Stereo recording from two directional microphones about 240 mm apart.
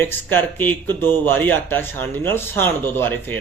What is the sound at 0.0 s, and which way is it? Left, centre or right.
Speech, centre.